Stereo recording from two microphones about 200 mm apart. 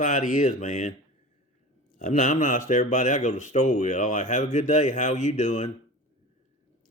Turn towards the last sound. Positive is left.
turn(degrees=35)  # may be behind; listen again after turning